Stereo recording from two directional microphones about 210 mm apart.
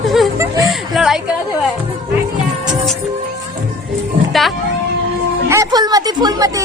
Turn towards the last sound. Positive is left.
turn(degrees=-15)  # may be behind; listen again after turning